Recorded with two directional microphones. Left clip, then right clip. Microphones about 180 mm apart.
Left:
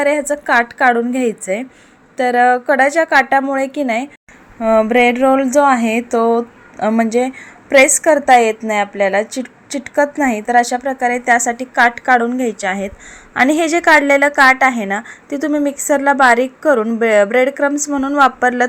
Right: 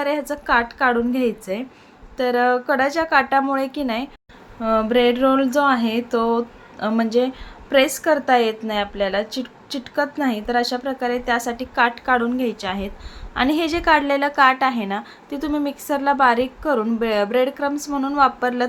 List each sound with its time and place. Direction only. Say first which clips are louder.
0.0 s a woman's voice: left 8 dB; 25° left (ahead or behind)